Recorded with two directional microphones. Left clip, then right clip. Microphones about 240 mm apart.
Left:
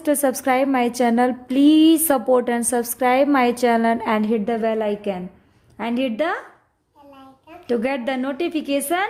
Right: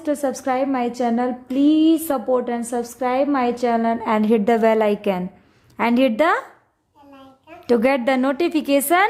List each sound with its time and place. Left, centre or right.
0.0 s a woman's voice: centre
4.3 s a woman's voice: centre
7.7 s a woman's voice: centre